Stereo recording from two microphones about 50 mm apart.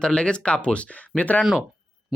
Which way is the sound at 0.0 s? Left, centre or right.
Centre.